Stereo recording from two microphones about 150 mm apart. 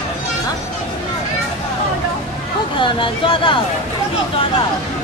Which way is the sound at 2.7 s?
35° left (ahead or behind).